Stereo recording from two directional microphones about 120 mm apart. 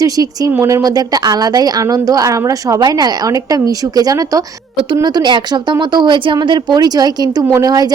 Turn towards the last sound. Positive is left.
turn(degrees=-30)  # may be behind; listen again after turning